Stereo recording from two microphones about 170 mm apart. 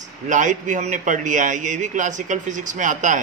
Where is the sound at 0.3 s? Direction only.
50° right (ahead or behind).